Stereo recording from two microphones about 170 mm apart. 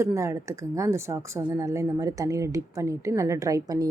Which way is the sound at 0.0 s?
15° right (ahead or behind).